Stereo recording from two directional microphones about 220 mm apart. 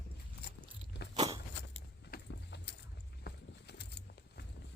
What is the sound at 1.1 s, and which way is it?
Biting, 20° right (ahead or behind).